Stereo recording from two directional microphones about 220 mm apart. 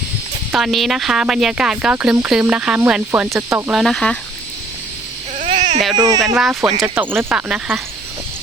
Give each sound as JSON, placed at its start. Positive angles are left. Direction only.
{"t": 0.5, "sound": "speech", "side_deg": 0}
{"t": 3.7, "sound": "speech", "side_deg": 0}
{"t": 5.4, "sound": "baby cry", "side_deg": -30}
{"t": 6.0, "sound": "speech", "side_deg": -20}
{"t": 6.2, "sound": "speech", "side_deg": -5}